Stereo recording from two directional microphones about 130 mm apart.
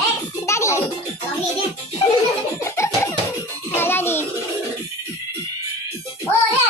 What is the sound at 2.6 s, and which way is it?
Music, 20° left (ahead or behind).